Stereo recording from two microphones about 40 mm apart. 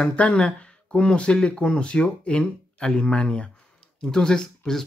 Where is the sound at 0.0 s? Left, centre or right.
Left.